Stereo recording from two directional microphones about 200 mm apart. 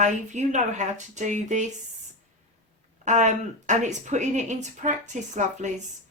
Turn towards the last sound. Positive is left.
turn(degrees=-35)  # may be behind; listen again after turning